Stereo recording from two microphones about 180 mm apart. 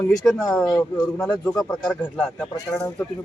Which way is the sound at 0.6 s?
15° left (ahead or behind).